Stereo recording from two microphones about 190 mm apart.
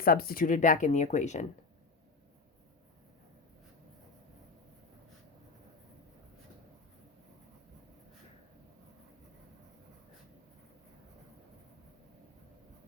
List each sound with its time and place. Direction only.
0.0 s speech: 50° left (ahead or behind)